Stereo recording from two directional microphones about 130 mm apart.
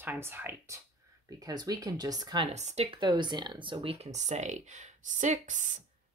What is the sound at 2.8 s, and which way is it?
Speech, 35° right (ahead or behind).